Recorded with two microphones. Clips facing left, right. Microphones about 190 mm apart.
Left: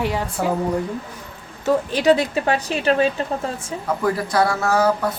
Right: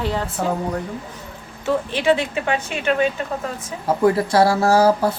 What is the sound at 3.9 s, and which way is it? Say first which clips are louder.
Speech: right 5 dB; 25° right (ahead or behind).